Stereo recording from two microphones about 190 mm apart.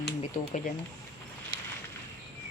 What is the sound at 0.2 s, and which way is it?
Speech, 40° left (ahead or behind).